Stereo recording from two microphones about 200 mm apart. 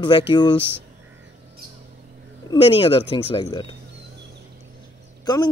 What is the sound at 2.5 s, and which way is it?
A man's voice, 25° left (ahead or behind).